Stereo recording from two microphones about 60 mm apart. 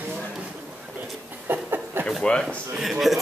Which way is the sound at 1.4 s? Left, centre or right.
Right.